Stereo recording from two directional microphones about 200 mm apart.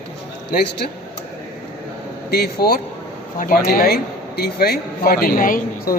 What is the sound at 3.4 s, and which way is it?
Speech, 45° left (ahead or behind).